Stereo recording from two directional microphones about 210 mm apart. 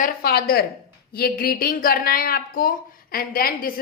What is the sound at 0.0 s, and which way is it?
A woman's voice, 45° left (ahead or behind).